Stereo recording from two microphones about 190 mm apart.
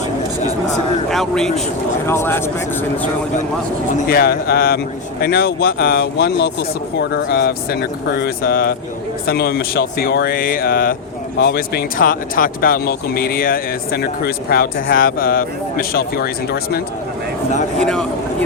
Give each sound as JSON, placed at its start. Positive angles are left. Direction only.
{"t": 1.1, "sound": "speech", "side_deg": 0}
{"t": 2.0, "sound": "speech", "side_deg": 10}
{"t": 3.9, "sound": "speech", "side_deg": 50}
{"t": 17.7, "sound": "speech", "side_deg": 5}